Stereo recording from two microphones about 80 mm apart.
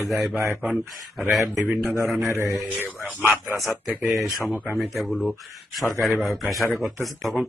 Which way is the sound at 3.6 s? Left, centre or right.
Centre.